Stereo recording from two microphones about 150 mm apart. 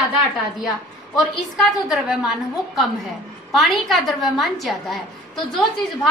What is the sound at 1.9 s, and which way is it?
Speech, 5° right (ahead or behind).